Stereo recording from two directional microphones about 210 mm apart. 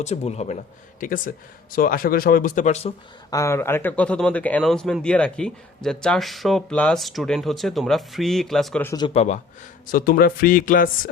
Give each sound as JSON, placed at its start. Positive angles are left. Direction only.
{"t": 0.0, "sound": "speech", "side_deg": 30}
{"t": 3.2, "sound": "speech", "side_deg": 15}
{"t": 8.9, "sound": "speech", "side_deg": 20}
{"t": 9.8, "sound": "speech", "side_deg": 45}